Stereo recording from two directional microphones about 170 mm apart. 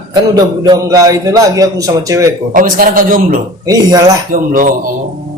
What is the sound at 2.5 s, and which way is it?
Speech, 55° right (ahead or behind).